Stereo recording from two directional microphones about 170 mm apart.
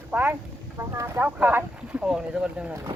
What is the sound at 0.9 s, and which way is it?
Speech, 15° right (ahead or behind).